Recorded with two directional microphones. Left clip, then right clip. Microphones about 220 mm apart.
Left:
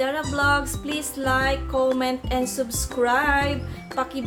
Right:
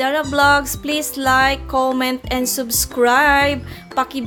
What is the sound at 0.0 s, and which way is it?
Music, 30° right (ahead or behind).